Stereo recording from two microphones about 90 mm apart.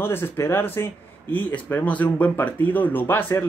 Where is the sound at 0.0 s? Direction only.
25° left (ahead or behind).